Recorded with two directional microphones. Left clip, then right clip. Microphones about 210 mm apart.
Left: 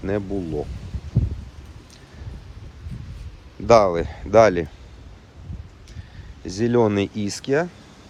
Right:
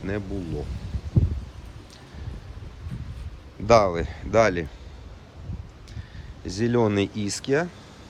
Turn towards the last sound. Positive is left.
turn(degrees=0)  # may be behind; listen again after turning